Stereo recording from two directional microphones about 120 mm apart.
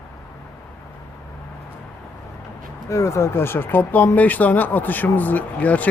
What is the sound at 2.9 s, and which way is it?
Speech, 25° left (ahead or behind).